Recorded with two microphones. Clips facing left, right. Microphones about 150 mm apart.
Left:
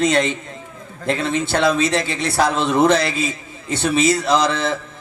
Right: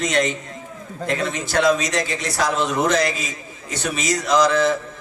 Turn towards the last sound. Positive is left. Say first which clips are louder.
# right 1 dB
turn(degrees=30)  # may be behind; listen again after turning